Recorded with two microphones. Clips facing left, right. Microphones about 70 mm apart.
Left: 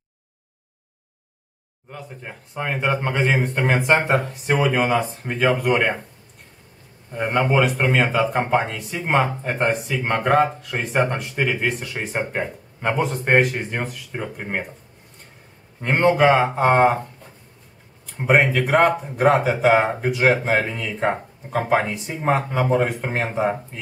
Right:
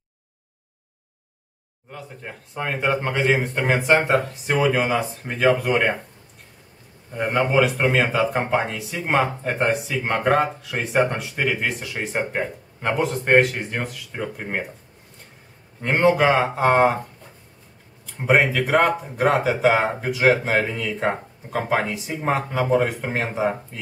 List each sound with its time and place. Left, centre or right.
1.9 s speech: centre
7.1 s speech: centre
15.8 s speech: centre
18.1 s speech: centre